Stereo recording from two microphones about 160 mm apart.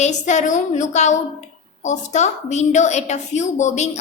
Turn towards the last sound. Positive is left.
turn(degrees=45)  # may be behind; listen again after turning